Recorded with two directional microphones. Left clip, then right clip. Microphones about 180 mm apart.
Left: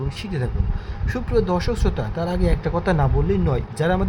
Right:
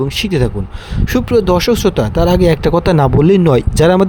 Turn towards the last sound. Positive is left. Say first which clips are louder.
# right 12 dB
turn(degrees=-60)  # may be behind; listen again after turning